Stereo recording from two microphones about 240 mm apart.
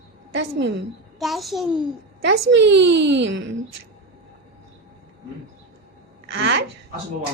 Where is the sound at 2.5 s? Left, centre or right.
Right.